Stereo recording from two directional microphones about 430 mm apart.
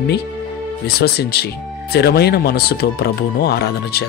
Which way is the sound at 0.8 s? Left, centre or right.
Left.